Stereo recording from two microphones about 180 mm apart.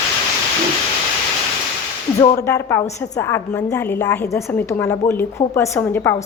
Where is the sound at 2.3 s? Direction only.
15° left (ahead or behind).